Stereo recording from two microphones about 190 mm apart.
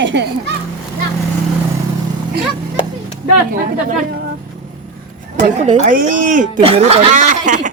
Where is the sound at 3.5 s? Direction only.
50° right (ahead or behind).